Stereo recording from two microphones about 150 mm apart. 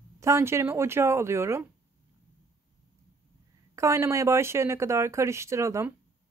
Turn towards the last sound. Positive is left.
turn(degrees=-20)  # may be behind; listen again after turning